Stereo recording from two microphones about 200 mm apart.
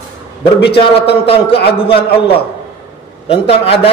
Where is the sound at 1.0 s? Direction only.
30° left (ahead or behind).